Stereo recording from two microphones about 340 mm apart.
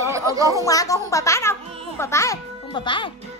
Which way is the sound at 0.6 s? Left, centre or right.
Centre.